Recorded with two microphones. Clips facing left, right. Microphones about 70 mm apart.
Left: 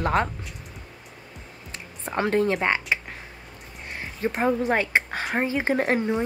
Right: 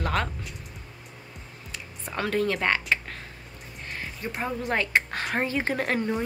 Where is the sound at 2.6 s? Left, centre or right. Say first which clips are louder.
Left 1 dB; centre.